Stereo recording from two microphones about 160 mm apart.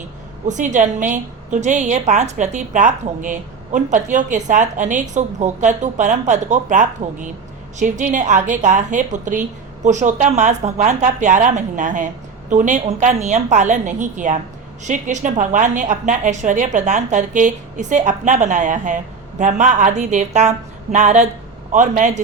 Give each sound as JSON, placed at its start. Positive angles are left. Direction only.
{"t": 0.4, "sound": "a woman's voice", "side_deg": -50}